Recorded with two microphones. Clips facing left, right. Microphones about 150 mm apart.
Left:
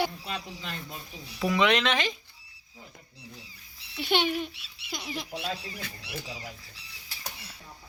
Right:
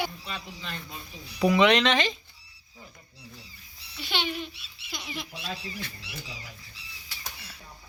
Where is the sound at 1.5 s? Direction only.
5° left (ahead or behind).